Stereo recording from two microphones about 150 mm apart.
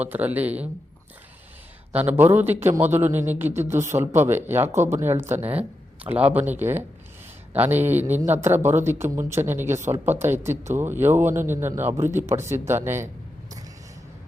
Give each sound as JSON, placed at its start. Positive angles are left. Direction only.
{"t": 0.0, "sound": "a man's voice", "side_deg": -10}
{"t": 2.0, "sound": "a man's voice", "side_deg": -10}